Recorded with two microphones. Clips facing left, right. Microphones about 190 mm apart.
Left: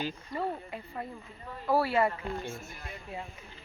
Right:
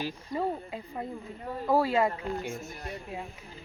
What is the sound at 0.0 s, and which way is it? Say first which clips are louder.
Speech: right 2 dB; 15° right (ahead or behind).